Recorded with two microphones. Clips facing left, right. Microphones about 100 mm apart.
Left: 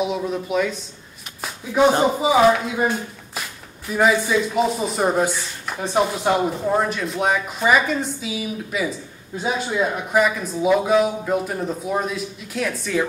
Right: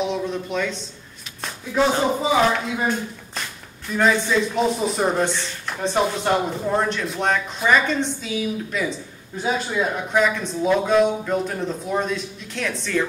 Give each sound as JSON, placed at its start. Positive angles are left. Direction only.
{"t": 0.0, "sound": "speech", "side_deg": 5}
{"t": 1.7, "sound": "speech", "side_deg": 20}